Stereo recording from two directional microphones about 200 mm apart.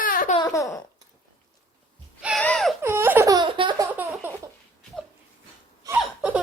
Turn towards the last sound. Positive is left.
turn(degrees=-5)  # may be behind; listen again after turning